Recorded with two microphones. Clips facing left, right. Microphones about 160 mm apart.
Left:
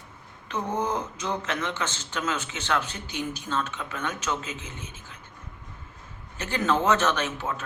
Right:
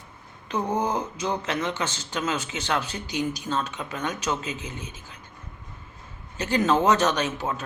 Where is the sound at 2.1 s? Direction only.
35° right (ahead or behind).